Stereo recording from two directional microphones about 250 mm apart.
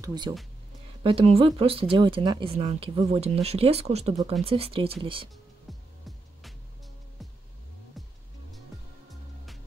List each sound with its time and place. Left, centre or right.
0.0 s speech: centre
5.7 s music: centre
8.0 s music: centre